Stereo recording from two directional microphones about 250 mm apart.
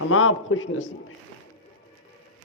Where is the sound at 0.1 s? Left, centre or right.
Left.